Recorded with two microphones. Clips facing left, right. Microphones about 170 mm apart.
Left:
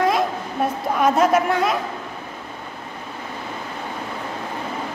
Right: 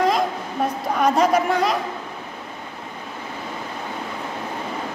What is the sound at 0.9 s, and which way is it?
Speech, 5° left (ahead or behind).